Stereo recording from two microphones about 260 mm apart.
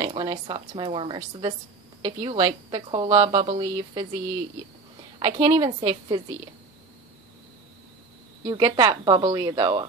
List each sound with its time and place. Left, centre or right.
0.0 s a woman's voice: centre
5.2 s speech: centre
8.5 s speech: centre